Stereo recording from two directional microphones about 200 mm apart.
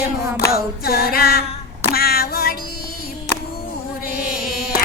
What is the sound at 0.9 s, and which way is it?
Music, 50° left (ahead or behind).